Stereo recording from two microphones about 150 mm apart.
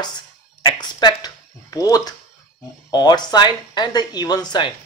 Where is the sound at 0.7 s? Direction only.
30° left (ahead or behind).